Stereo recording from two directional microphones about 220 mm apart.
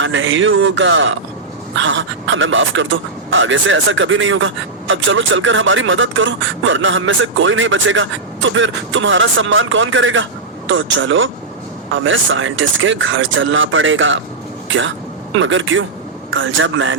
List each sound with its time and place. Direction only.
0.0 s a man's voice: 60° right (ahead or behind)